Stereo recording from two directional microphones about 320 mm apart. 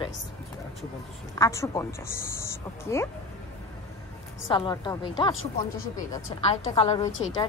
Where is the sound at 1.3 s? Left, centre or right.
Centre.